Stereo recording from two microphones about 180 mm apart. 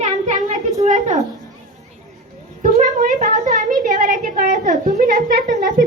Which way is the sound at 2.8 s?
45° right (ahead or behind).